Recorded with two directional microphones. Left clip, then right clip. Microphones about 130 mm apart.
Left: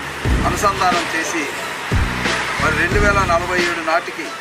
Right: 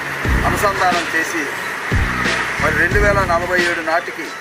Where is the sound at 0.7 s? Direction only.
Centre (ahead or behind).